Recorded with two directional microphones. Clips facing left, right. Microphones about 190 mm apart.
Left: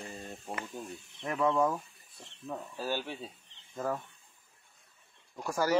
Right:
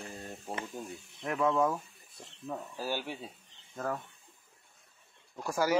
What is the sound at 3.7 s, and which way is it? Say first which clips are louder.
Speech: left 1 dB; 5° left (ahead or behind).